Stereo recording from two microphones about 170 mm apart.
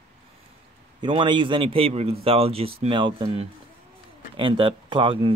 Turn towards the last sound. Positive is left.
turn(degrees=-30)  # may be behind; listen again after turning